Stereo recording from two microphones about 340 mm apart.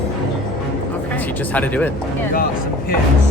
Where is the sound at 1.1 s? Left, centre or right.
Centre.